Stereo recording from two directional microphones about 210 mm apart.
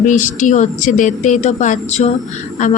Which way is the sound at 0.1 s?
35° left (ahead or behind).